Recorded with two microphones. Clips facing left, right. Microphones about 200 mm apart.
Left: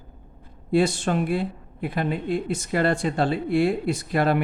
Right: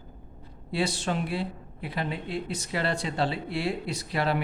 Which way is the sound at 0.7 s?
50° left (ahead or behind).